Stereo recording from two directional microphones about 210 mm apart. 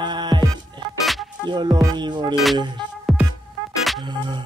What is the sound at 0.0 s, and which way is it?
Music, 20° right (ahead or behind).